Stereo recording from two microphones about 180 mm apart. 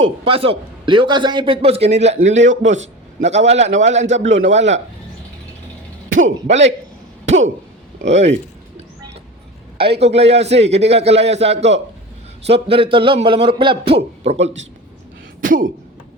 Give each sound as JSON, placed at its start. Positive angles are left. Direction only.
{"t": 0.0, "sound": "a man's voice", "side_deg": -30}
{"t": 4.3, "sound": "a man's voice", "side_deg": -90}
{"t": 4.5, "sound": "a man's voice", "side_deg": -40}
{"t": 7.3, "sound": "a man's voice", "side_deg": -40}
{"t": 10.0, "sound": "a man's voice", "side_deg": -35}
{"t": 15.4, "sound": "speech", "side_deg": -50}